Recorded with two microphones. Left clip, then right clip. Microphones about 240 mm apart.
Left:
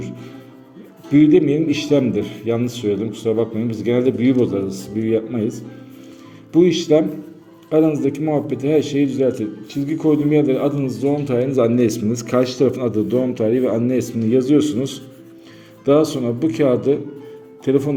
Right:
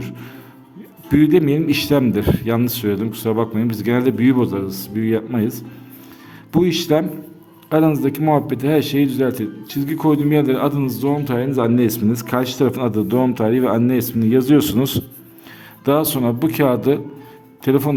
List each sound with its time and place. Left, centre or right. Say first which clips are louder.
1.1 s a man's voice: left 1 dB; right
6.7 s a man's voice: left 2 dB; right